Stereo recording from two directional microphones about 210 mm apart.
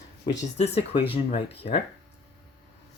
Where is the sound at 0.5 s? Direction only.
30° left (ahead or behind).